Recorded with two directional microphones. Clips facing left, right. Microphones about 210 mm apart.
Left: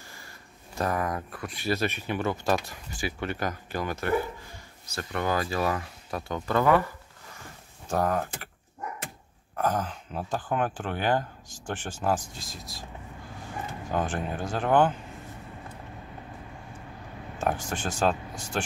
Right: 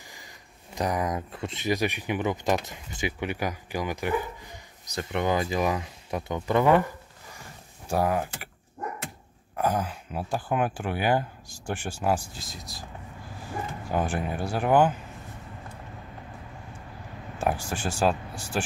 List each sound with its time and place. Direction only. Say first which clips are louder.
0.7 s speech: right 1 dB; 15° right (ahead or behind)
7.9 s speech: right 1 dB; 10° right (ahead or behind)
9.6 s speech: right 1 dB; 10° right (ahead or behind)
12.4 s speech: even; centre (ahead or behind)
13.8 s speech: right 1 dB; 10° right (ahead or behind)
17.4 s speech: right 1 dB; 10° right (ahead or behind)